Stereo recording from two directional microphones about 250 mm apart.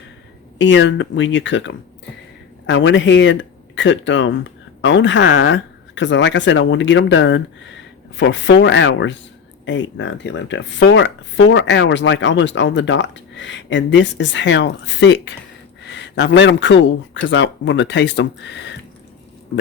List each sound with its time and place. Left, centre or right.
0.6 s speech: left